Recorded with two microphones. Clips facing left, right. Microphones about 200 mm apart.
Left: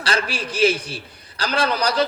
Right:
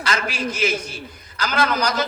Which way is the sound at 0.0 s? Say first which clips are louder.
Even; 30° left (ahead or behind).